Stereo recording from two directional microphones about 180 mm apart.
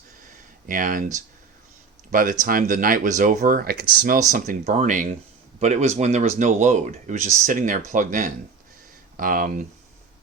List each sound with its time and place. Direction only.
0.7 s speech: 50° right (ahead or behind)